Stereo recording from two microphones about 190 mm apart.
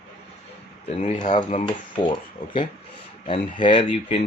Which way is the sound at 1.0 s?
30° left (ahead or behind).